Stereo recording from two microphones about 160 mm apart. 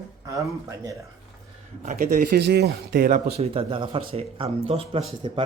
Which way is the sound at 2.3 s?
90° right.